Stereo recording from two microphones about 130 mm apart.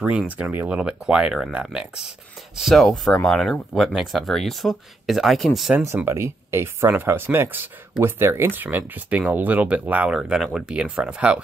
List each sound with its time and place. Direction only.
0.0 s speech: 10° right (ahead or behind)
5.8 s speech: 15° right (ahead or behind)